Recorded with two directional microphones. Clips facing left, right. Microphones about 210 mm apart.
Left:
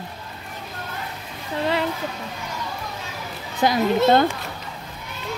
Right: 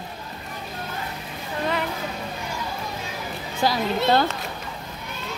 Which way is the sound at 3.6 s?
20° left (ahead or behind).